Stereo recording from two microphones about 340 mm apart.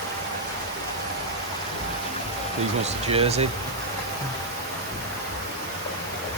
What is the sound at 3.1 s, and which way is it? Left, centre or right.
Speech, centre.